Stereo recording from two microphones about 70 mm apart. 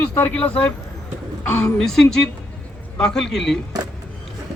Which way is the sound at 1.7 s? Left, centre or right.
Centre.